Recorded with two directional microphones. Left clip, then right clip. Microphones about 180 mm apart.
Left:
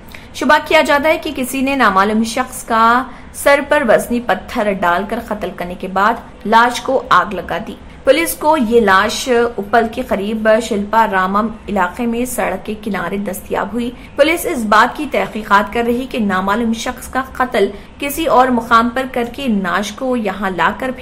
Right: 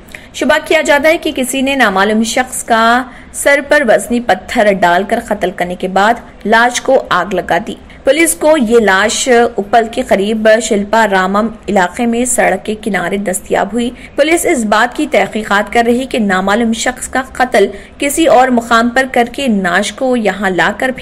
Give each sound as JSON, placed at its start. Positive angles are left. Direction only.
{"t": 0.4, "sound": "a woman's voice", "side_deg": -15}